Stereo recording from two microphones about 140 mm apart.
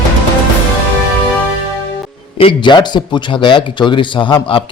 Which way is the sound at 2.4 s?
40° left (ahead or behind).